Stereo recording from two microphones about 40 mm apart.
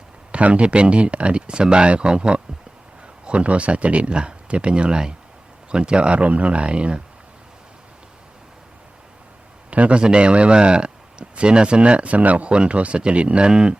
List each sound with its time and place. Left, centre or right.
0.3 s a man's voice: right
9.6 s a man's voice: right
12.5 s a man's voice: right